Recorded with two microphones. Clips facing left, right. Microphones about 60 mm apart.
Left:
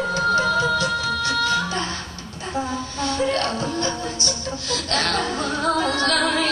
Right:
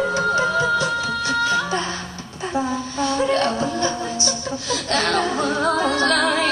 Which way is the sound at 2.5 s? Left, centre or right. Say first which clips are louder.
Right 3 dB; right.